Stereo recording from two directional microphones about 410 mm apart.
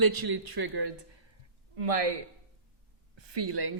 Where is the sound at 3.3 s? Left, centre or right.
Right.